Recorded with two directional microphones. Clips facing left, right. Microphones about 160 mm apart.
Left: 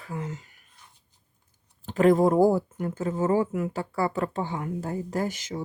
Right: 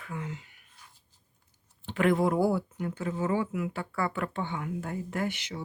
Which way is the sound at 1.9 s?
40° left (ahead or behind).